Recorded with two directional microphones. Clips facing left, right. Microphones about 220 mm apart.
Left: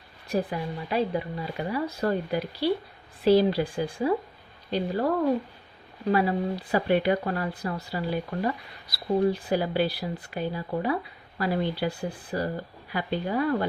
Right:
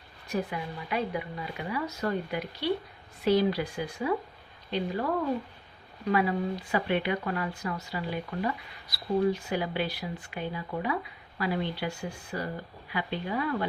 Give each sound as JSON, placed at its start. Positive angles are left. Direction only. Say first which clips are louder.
{"t": 0.3, "sound": "speech", "louder": "left 4 dB", "side_deg": 35}
{"t": 6.1, "sound": "speech", "louder": "left 3 dB", "side_deg": 35}